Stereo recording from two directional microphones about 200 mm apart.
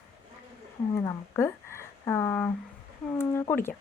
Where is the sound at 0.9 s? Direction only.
15° left (ahead or behind).